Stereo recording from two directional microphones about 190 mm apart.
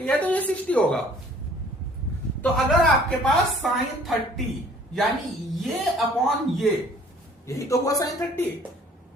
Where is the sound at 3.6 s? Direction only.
Centre (ahead or behind).